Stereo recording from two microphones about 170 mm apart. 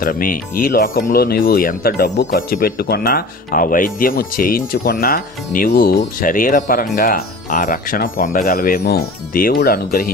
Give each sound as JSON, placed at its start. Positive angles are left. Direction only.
{"t": 0.0, "sound": "speech", "side_deg": 55}